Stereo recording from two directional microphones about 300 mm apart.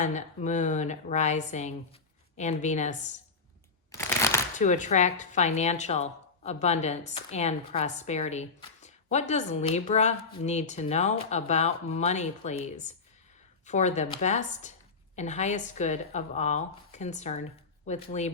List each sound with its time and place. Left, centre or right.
0.0 s speech: left
3.9 s a sound: centre
4.5 s speech: left